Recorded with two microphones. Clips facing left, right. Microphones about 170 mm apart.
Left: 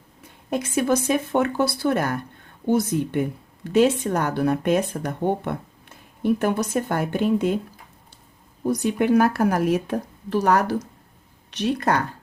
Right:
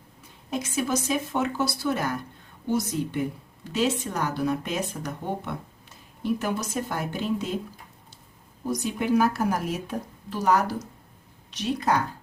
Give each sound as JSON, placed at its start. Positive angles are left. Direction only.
{"t": 0.2, "sound": "speech", "side_deg": 60}
{"t": 8.6, "sound": "speech", "side_deg": 60}